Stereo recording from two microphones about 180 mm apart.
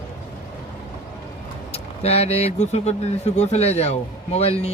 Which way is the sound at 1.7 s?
35° left (ahead or behind).